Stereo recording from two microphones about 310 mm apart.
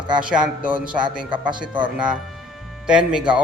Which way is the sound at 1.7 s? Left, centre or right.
Centre.